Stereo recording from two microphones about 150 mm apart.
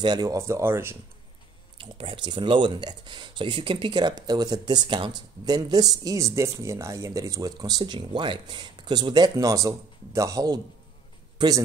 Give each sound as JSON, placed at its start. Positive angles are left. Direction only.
{"t": 0.0, "sound": "speech", "side_deg": -25}
{"t": 1.8, "sound": "a man's voice", "side_deg": -35}